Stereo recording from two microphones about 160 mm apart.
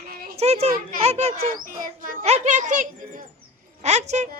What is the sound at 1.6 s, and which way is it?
Speech, 60° right (ahead or behind).